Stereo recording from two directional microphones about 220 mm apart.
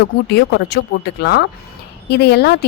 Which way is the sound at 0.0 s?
50° left (ahead or behind).